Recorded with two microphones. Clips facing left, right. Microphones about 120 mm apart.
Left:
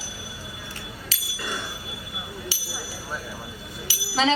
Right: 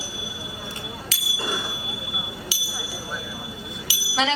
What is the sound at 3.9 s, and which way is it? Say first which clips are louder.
Bell: left 2 dB; 35° left (ahead or behind).